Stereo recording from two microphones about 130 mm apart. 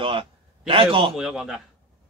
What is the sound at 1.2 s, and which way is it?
Speech, 5° right (ahead or behind).